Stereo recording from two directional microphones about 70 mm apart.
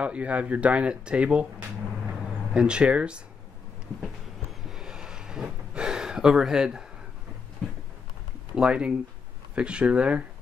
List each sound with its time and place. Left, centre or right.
0.0 s speech: centre
2.5 s speech: centre
4.6 s a sound: centre
8.5 s speech: centre